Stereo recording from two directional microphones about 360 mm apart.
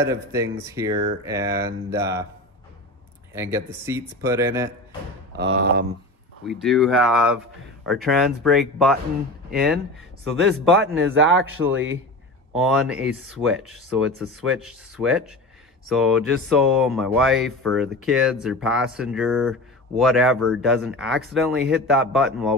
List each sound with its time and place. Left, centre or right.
0.1 s speech: centre
3.3 s speech: centre
5.4 s speech: right
6.6 s speech: centre
11.0 s a man's voice: right
12.5 s speech: centre